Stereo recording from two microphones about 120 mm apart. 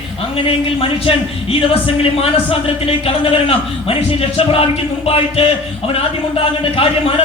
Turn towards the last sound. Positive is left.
turn(degrees=50)  # may be behind; listen again after turning